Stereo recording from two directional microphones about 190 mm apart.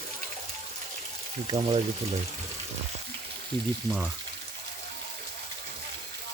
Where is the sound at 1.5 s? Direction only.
30° right (ahead or behind).